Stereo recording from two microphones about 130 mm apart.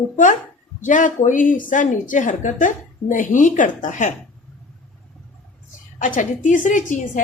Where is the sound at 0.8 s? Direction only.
80° left.